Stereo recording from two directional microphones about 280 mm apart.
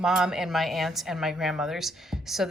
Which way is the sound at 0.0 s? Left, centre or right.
Centre.